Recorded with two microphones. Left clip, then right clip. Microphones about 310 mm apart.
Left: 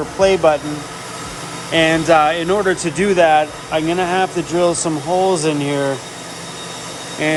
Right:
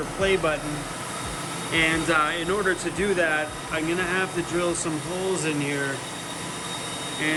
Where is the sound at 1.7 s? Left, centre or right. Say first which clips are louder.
Left 9 dB; centre.